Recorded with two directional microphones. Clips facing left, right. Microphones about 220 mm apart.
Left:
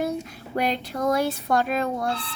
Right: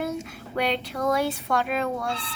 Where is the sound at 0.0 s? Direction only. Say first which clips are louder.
Left 2 dB; 40° left (ahead or behind).